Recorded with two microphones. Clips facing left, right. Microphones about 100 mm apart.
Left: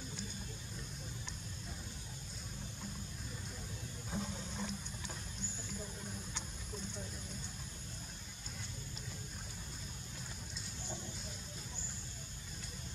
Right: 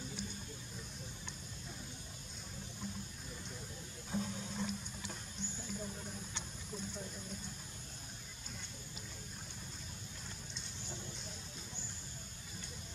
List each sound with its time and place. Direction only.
4.1 s water: centre (ahead or behind)